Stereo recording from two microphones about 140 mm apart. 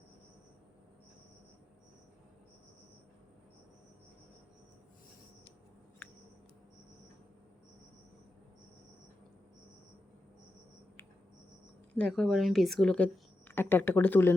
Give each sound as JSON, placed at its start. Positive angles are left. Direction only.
{"t": 11.9, "sound": "a woman's voice", "side_deg": 5}
{"t": 13.5, "sound": "speech", "side_deg": 15}